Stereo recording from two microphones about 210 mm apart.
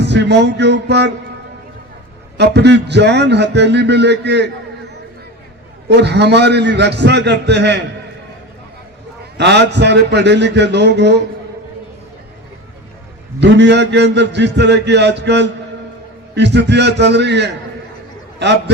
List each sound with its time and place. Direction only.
0.0 s a man's voice: 55° right (ahead or behind)
2.4 s a man's voice: 55° right (ahead or behind)
5.9 s a man's voice: 55° right (ahead or behind)
9.4 s a man's voice: 55° right (ahead or behind)
13.4 s a man's voice: 55° right (ahead or behind)